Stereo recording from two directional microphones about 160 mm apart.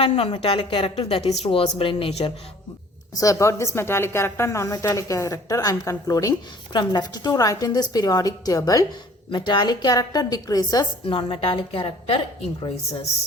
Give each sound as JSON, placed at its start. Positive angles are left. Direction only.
{"t": 0.0, "sound": "a woman's voice", "side_deg": 35}
{"t": 3.2, "sound": "a woman's voice", "side_deg": 20}